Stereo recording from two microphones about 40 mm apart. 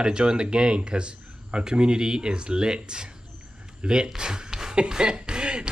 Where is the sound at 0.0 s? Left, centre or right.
Right.